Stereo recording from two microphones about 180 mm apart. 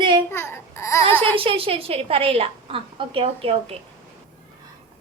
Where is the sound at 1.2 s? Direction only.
30° right (ahead or behind).